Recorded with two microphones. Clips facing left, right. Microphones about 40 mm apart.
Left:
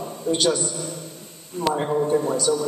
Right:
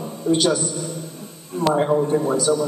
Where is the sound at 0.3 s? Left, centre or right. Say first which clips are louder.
Right 3 dB; centre.